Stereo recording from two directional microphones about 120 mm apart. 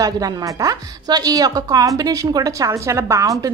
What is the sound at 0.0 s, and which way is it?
A woman's voice, 30° right (ahead or behind).